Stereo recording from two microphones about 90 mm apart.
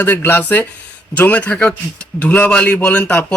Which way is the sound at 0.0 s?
25° left (ahead or behind).